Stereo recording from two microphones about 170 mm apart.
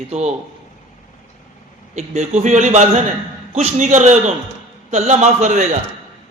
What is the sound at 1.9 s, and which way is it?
A man's voice, 40° right (ahead or behind).